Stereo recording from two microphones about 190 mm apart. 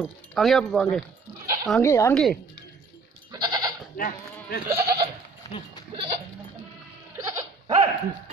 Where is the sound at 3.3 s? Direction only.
20° right (ahead or behind).